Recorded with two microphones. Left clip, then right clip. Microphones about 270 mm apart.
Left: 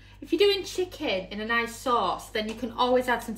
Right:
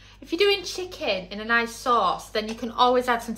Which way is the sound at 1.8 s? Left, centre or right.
Right.